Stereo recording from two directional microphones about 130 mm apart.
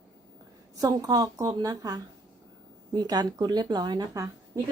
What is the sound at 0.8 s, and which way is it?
A woman's voice, 30° right (ahead or behind).